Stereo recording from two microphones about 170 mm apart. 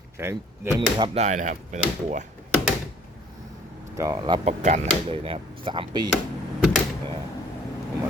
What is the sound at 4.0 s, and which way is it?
Speech, 25° right (ahead or behind).